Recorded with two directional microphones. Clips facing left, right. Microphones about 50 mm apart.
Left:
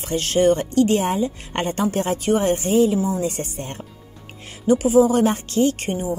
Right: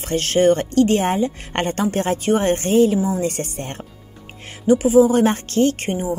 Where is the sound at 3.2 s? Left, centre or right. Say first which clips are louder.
Right 2 dB; right.